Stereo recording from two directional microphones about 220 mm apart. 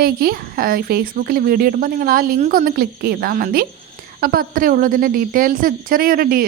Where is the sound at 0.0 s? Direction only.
45° right (ahead or behind).